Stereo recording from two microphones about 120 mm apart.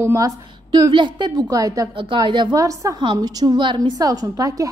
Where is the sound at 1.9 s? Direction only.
45° right (ahead or behind).